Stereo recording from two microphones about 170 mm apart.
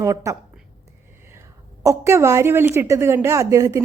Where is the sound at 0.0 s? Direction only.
20° right (ahead or behind).